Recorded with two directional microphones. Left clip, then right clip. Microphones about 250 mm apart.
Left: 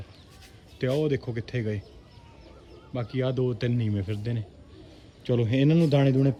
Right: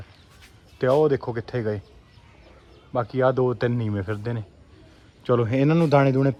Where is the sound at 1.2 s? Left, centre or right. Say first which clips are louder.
Right 6 dB; right.